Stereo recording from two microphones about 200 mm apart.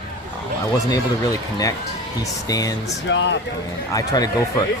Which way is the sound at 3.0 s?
65° left (ahead or behind).